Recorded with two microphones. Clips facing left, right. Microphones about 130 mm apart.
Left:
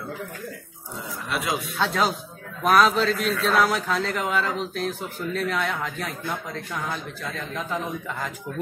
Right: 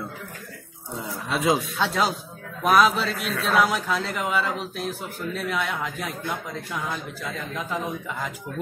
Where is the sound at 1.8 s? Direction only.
5° right (ahead or behind).